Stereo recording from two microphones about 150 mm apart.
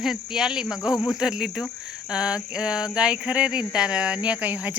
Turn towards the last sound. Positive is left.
turn(degrees=-10)  # may be behind; listen again after turning